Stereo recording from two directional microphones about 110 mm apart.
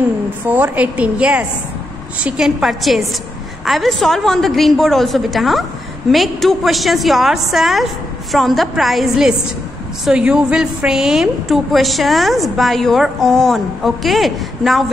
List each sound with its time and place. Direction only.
0.5 s a woman's voice: 15° right (ahead or behind)